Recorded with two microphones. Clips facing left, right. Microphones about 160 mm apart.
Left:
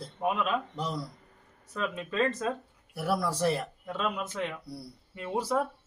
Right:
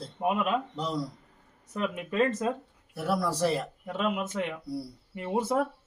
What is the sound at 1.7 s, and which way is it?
Speech, 15° right (ahead or behind).